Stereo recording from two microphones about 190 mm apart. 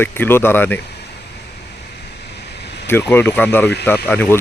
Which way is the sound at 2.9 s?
10° left (ahead or behind).